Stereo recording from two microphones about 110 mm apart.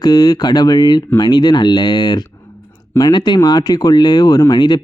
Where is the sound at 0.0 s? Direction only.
35° left (ahead or behind).